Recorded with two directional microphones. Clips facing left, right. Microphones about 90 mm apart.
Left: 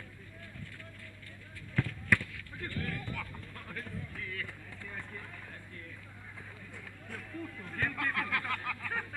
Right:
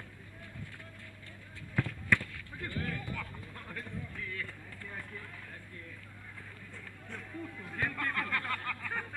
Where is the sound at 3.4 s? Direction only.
5° right (ahead or behind).